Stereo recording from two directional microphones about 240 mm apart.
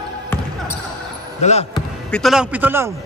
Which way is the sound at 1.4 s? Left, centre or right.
Left.